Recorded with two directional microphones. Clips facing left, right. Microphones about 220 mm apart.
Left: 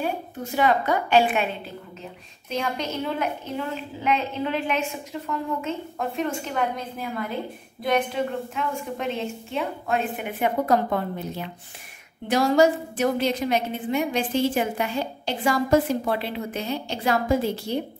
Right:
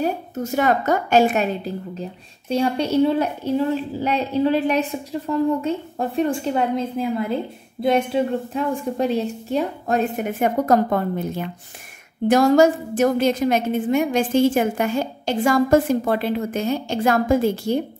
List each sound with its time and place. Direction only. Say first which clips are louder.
0.0 s a woman's voice: right 5 dB; 45° right (ahead or behind)